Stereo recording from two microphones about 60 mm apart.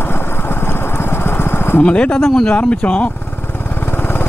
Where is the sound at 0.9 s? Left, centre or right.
Left.